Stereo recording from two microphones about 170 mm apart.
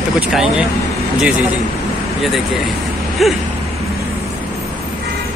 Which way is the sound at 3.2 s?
Centre (ahead or behind).